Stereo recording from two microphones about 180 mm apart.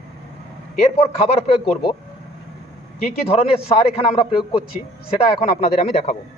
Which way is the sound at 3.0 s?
35° left (ahead or behind).